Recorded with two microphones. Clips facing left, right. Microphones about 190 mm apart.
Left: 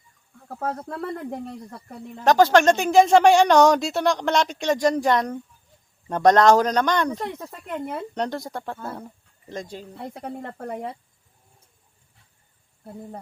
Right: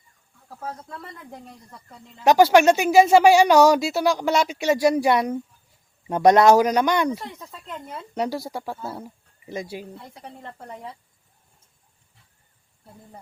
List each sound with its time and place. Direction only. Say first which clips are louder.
0.4 s speech: left 6 dB; 55° left (ahead or behind)
2.2 s speech: right 1 dB; 10° right (ahead or behind)
7.3 s speech: left 6 dB; 60° left (ahead or behind)
8.1 s speech: right 6 dB; 5° right (ahead or behind)
10.0 s speech: left 8 dB; 55° left (ahead or behind)